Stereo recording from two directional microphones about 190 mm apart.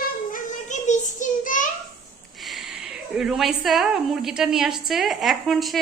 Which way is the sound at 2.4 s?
Centre (ahead or behind).